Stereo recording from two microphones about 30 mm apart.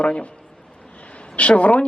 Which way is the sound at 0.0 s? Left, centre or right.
Left.